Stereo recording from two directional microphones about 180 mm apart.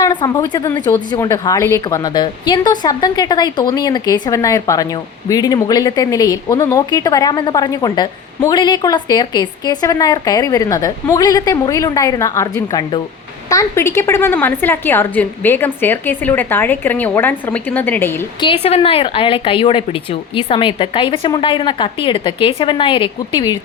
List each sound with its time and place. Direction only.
0.0 s speech: 20° left (ahead or behind)
0.7 s a woman's voice: 10° left (ahead or behind)
18.3 s speech: 30° left (ahead or behind)